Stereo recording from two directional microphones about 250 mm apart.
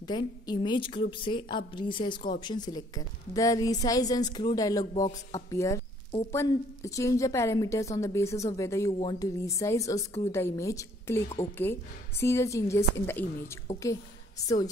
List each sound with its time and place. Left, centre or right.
0.0 s a woman's voice: centre